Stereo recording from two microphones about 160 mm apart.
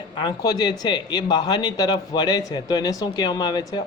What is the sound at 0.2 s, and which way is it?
Speech, 25° left (ahead or behind).